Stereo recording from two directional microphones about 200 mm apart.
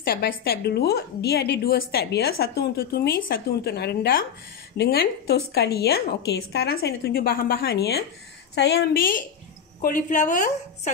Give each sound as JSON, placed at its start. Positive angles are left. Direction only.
{"t": 0.0, "sound": "a woman's voice", "side_deg": 50}